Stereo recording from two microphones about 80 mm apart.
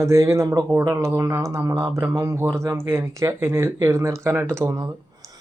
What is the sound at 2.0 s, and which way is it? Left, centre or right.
Speech, right.